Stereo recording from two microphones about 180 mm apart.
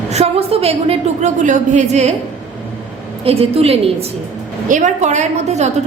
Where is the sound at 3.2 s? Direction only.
35° right (ahead or behind).